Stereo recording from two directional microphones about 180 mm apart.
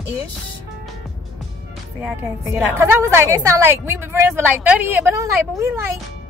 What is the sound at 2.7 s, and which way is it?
A woman's voice, 15° right (ahead or behind).